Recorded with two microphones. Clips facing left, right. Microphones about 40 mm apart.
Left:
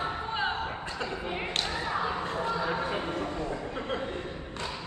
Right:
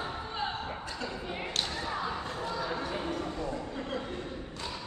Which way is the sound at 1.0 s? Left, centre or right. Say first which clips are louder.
Left 5 dB; left.